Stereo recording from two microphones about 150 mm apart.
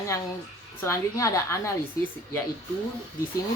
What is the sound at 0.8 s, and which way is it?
Speech, 20° left (ahead or behind).